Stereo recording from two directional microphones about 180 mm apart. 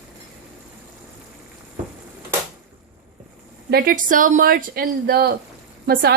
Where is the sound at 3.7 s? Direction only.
55° right (ahead or behind).